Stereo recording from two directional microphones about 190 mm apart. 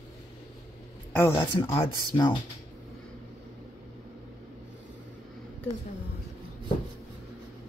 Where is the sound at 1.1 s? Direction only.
10° left (ahead or behind).